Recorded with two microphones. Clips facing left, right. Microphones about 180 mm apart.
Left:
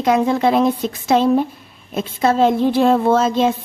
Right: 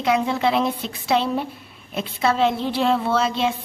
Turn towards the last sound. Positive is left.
turn(degrees=45)  # may be behind; listen again after turning